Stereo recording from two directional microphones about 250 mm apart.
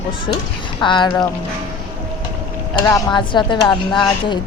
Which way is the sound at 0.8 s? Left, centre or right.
Centre.